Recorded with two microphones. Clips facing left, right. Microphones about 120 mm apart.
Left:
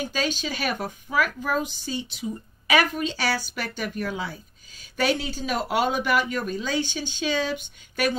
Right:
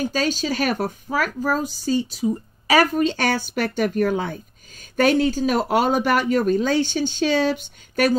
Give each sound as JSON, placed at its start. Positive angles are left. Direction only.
{"t": 0.0, "sound": "a woman's voice", "side_deg": -40}